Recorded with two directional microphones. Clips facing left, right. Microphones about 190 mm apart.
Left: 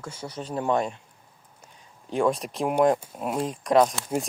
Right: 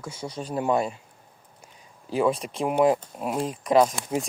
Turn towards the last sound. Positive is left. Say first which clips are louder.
# even
turn(degrees=0)  # may be behind; listen again after turning